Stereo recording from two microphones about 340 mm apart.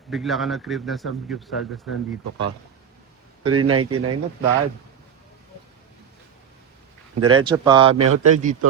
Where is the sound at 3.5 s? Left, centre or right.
Right.